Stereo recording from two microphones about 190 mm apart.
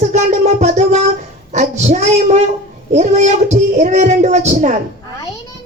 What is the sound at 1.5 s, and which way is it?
Female singing, 35° right (ahead or behind).